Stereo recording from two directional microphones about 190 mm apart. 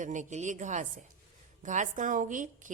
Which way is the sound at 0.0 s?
40° right (ahead or behind).